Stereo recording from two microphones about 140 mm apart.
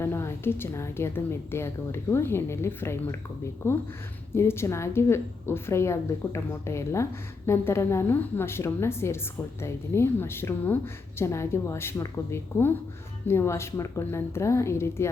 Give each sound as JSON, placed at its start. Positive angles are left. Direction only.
{"t": 0.0, "sound": "a woman's voice", "side_deg": 20}